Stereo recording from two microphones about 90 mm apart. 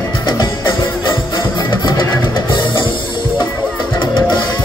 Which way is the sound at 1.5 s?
55° left (ahead or behind).